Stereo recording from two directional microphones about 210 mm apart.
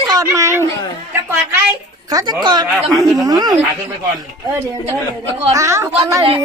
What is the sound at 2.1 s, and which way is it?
A woman's voice, 15° right (ahead or behind).